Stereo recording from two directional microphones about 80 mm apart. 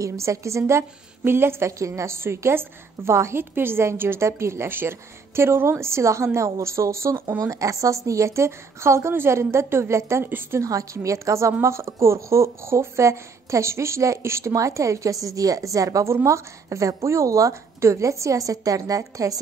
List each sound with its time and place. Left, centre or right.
0.0 s a woman's voice: right
10.6 s a woman's voice: right